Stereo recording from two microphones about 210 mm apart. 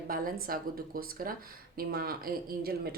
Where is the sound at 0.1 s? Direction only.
40° right (ahead or behind).